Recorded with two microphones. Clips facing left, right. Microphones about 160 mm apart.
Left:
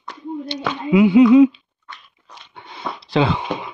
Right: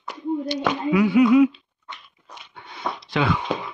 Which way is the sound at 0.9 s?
20° left (ahead or behind).